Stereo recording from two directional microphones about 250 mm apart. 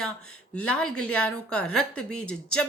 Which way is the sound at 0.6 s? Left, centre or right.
Centre.